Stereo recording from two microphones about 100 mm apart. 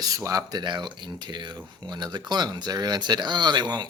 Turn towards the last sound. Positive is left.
turn(degrees=-45)  # may be behind; listen again after turning